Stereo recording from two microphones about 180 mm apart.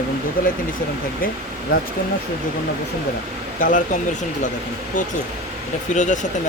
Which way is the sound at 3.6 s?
45° left (ahead or behind).